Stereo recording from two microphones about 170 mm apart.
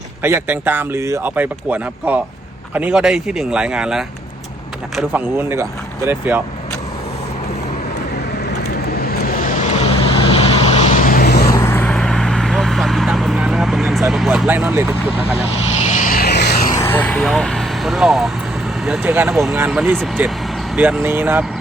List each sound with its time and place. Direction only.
0.2 s speech: 15° right (ahead or behind)
9.0 s vehicle: 55° left (ahead or behind)
11.4 s vehicle: 15° left (ahead or behind); by 14.0 s centre (ahead or behind)
14.1 s a sound: centre (ahead or behind)
16.0 s vehicle: 55° left (ahead or behind); by 16.6 s 75° left (ahead or behind)
16.7 s vehicle: 15° left (ahead or behind)
18.9 s speech: 10° right (ahead or behind)
19.3 s speech: centre (ahead or behind)
19.5 s speech: 10° right (ahead or behind)